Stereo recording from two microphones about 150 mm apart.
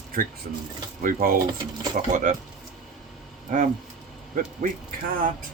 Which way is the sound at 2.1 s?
60° right (ahead or behind).